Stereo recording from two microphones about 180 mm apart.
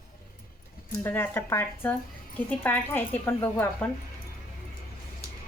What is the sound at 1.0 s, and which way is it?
A woman's voice, 10° left (ahead or behind).